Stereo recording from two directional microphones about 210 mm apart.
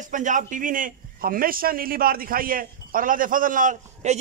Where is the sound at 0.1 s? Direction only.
40° right (ahead or behind).